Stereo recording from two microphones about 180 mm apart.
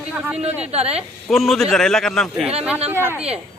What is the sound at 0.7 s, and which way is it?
Speech, 35° right (ahead or behind).